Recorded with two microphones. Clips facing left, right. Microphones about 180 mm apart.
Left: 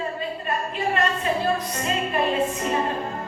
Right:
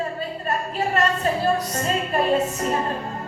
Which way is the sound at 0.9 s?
40° right (ahead or behind).